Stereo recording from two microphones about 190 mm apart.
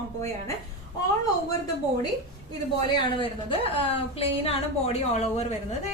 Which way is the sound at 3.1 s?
25° left (ahead or behind).